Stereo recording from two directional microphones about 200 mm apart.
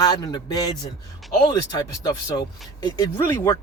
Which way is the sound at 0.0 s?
20° left (ahead or behind).